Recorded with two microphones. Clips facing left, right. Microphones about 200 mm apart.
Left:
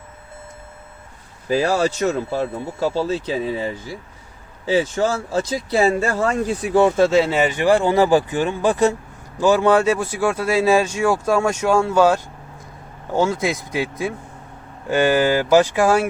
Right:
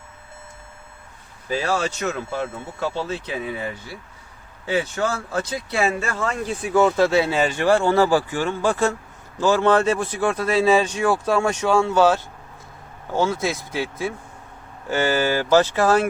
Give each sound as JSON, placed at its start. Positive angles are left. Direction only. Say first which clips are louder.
{"t": 1.5, "sound": "speech", "louder": "left 5 dB", "side_deg": 35}
{"t": 6.8, "sound": "speech", "louder": "left 3 dB", "side_deg": 20}